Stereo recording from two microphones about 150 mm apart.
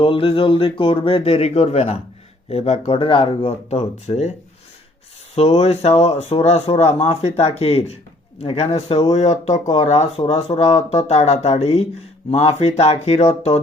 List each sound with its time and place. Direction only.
0.0 s speech: 35° left (ahead or behind)
5.3 s speech: 45° left (ahead or behind)